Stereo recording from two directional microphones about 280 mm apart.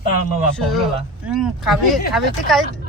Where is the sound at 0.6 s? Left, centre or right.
Centre.